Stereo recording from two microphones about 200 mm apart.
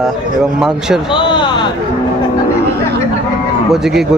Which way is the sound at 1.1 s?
25° left (ahead or behind).